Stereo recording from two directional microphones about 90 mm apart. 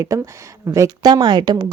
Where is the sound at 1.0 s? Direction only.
55° right (ahead or behind).